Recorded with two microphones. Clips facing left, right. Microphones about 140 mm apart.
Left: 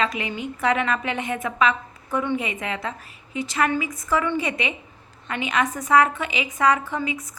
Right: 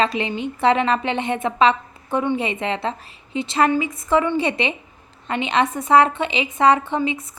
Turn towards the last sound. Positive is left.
turn(degrees=-25)  # may be behind; listen again after turning